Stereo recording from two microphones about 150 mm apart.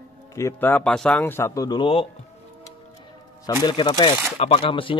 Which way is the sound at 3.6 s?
30° left (ahead or behind).